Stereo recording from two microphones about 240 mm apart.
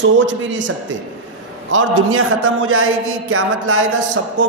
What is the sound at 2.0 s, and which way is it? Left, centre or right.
Speech, right.